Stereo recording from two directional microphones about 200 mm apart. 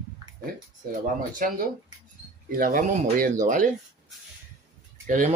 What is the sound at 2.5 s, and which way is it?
Speech, 45° right (ahead or behind).